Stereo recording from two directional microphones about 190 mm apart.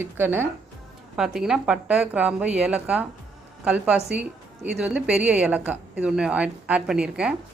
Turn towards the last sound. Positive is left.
turn(degrees=-5)  # may be behind; listen again after turning